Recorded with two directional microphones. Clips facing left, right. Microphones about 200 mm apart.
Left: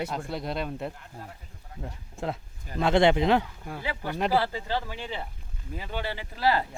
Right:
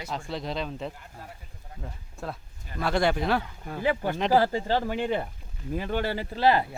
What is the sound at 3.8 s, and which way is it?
Speech, 50° right (ahead or behind).